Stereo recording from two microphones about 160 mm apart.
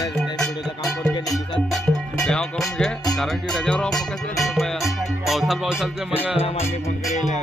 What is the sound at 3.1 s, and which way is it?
Speech, centre (ahead or behind).